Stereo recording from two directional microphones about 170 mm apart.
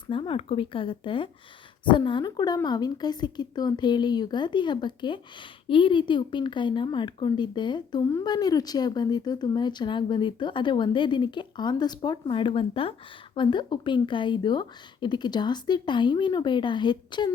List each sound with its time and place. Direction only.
0.1 s a woman's voice: 30° left (ahead or behind)